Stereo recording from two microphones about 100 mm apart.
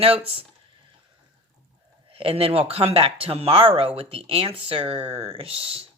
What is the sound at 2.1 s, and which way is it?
Speech, 70° right (ahead or behind).